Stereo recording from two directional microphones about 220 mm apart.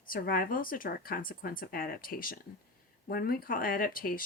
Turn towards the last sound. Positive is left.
turn(degrees=40)  # may be behind; listen again after turning